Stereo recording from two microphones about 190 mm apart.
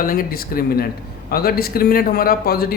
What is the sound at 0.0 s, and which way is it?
Speech, 50° left (ahead or behind).